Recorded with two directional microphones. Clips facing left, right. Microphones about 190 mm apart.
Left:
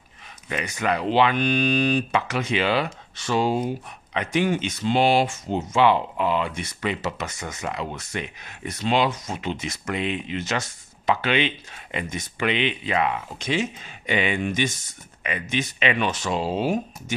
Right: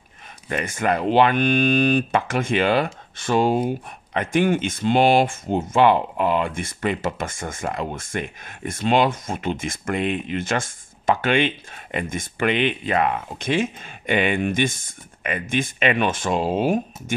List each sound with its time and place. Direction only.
0.5 s speech: 50° right (ahead or behind)